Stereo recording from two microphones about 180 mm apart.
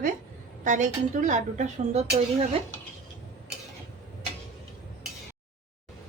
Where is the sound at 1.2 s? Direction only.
40° right (ahead or behind).